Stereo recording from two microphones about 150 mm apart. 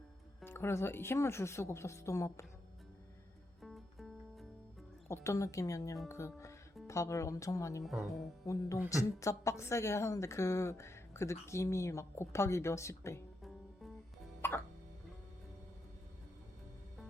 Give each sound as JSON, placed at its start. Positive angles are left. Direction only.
{"t": 0.4, "sound": "speech", "side_deg": 15}
{"t": 3.6, "sound": "music", "side_deg": 0}
{"t": 5.0, "sound": "a woman's voice", "side_deg": 20}
{"t": 7.9, "sound": "speech", "side_deg": 0}
{"t": 8.9, "sound": "a woman's voice", "side_deg": 20}
{"t": 14.4, "sound": "music", "side_deg": 15}